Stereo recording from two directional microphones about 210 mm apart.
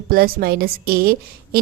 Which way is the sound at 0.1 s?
45° right (ahead or behind).